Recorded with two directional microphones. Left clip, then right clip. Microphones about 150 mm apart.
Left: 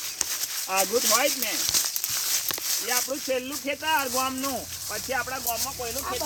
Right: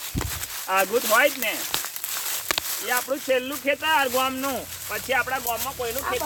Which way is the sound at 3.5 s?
Centre (ahead or behind).